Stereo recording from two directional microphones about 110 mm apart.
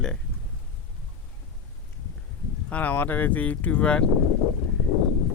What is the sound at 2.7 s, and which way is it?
Speech, 15° left (ahead or behind).